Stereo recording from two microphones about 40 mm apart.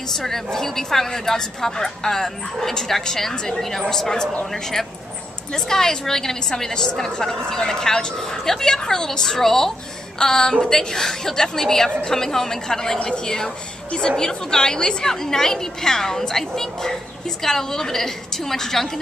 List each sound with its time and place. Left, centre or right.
0.1 s a woman's voice: centre
5.5 s a woman's voice: centre